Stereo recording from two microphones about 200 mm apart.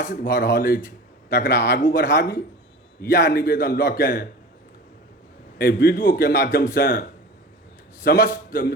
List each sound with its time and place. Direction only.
0.0 s a man's voice: 45° left (ahead or behind)
0.3 s a man's voice: 55° left (ahead or behind)
5.5 s a man's voice: 50° left (ahead or behind)
8.0 s a man's voice: 50° left (ahead or behind)